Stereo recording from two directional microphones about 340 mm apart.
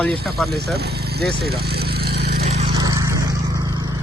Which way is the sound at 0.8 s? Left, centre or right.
Right.